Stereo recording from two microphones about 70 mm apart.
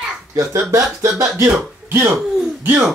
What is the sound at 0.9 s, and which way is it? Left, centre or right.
Speech, right.